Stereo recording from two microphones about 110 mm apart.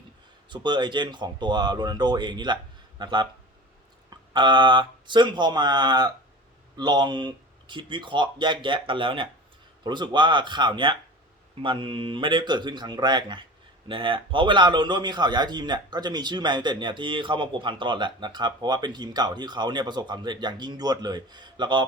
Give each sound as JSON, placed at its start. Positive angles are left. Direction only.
{"t": 0.5, "sound": "a man's voice", "side_deg": -45}